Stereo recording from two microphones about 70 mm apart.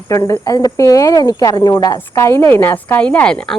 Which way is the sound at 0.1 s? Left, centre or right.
Left.